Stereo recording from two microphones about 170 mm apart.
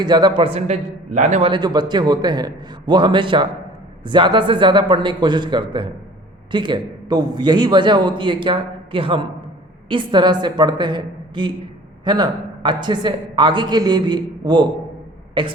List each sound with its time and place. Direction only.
0.0 s a man's voice: 25° right (ahead or behind); by 1.5 s 45° right (ahead or behind)
1.5 s a man's voice: 25° right (ahead or behind)